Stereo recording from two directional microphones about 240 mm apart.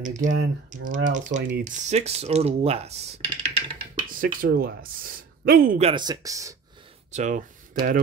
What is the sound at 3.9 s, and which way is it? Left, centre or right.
Speech, right.